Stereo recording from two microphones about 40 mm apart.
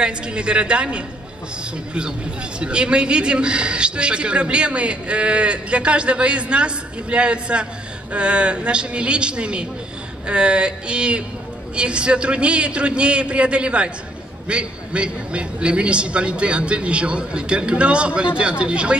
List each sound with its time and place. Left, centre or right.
0.0 s a man's voice: right
2.6 s a man's voice: right